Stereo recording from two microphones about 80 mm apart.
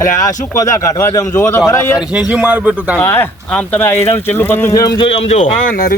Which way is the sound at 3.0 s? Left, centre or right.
Left.